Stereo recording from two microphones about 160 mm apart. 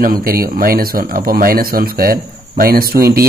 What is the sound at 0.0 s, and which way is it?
A man's voice, 65° right (ahead or behind).